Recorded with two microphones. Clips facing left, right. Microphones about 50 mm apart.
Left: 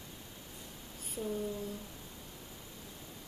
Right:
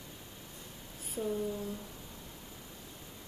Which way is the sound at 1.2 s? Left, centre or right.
Right.